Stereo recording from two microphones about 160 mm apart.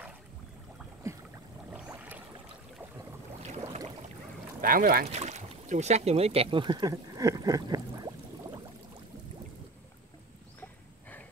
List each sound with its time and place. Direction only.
1.7 s boat: 10° right (ahead or behind)
4.6 s speech: 60° right (ahead or behind)
5.0 s a sound: 45° right (ahead or behind); by 8.5 s 25° right (ahead or behind)
10.6 s horse: 10° left (ahead or behind)